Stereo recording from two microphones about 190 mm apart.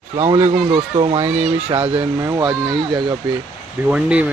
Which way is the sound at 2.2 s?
20° right (ahead or behind).